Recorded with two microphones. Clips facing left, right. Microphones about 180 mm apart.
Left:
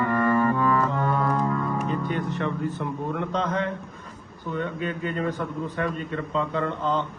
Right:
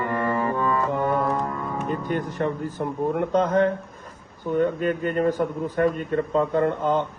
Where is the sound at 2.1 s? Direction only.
45° right (ahead or behind).